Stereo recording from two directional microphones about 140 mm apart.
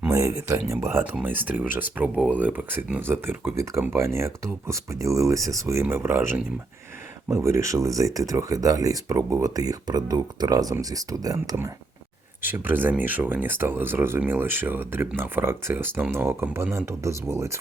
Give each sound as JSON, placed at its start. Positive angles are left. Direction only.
{"t": 0.1, "sound": "speech", "side_deg": -20}